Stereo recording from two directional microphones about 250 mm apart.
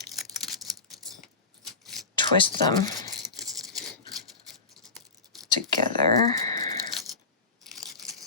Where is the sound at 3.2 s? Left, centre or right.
Centre.